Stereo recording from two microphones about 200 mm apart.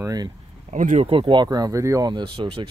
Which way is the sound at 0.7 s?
35° right (ahead or behind).